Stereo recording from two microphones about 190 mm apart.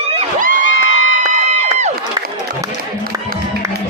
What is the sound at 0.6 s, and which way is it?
Crowd, 90° left.